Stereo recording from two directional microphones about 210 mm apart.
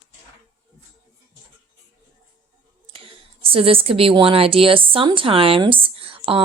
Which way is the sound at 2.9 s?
25° right (ahead or behind).